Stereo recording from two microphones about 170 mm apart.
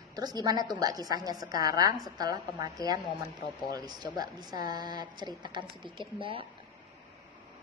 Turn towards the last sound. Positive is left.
turn(degrees=-30)  # may be behind; listen again after turning